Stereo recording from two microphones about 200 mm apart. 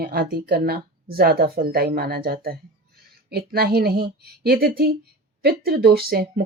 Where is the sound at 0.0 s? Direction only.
50° right (ahead or behind).